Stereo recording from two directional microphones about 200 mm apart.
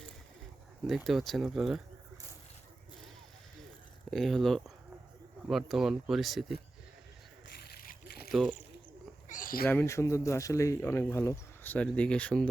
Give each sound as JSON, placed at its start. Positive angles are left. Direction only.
{"t": 0.9, "sound": "speech", "side_deg": 0}
{"t": 4.1, "sound": "speech", "side_deg": 0}
{"t": 7.6, "sound": "splash", "side_deg": 50}
{"t": 8.3, "sound": "speech", "side_deg": 0}
{"t": 9.3, "sound": "a sound", "side_deg": 45}
{"t": 9.6, "sound": "speech", "side_deg": 10}